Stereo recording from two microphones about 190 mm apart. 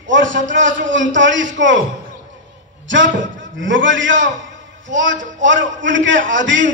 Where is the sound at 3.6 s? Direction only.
80° right.